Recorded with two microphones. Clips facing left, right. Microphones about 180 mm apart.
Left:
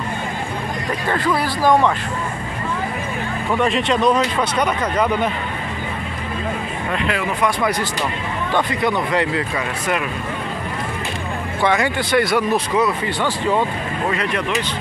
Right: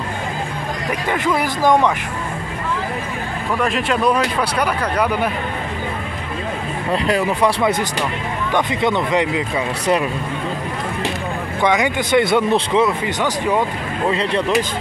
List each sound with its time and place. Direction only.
1.1 s speech: 20° right (ahead or behind)
3.5 s speech: centre (ahead or behind)
6.9 s speech: 35° right (ahead or behind)
8.5 s speech: 20° right (ahead or behind)
11.6 s speech: 15° right (ahead or behind)
14.1 s speech: 30° right (ahead or behind)